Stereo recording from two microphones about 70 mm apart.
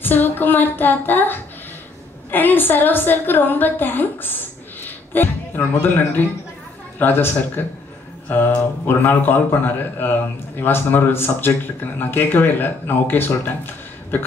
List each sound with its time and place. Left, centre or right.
0.0 s a woman's voice: left
4.8 s music: left
5.6 s a man's voice: left